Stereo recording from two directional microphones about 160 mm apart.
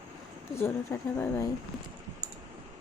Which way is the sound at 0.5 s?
15° left (ahead or behind).